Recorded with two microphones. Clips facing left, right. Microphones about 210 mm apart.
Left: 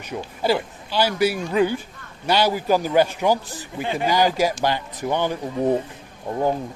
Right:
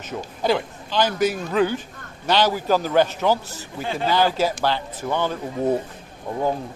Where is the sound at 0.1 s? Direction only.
5° left (ahead or behind).